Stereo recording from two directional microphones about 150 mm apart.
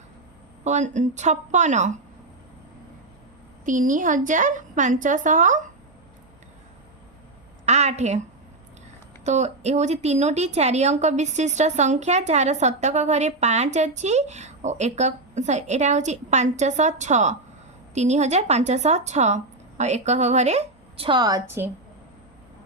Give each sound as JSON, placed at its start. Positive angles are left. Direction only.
{"t": 0.6, "sound": "a woman's voice", "side_deg": -50}
{"t": 3.7, "sound": "a woman's voice", "side_deg": -60}
{"t": 7.6, "sound": "a sound", "side_deg": -50}
{"t": 9.2, "sound": "a woman's voice", "side_deg": -50}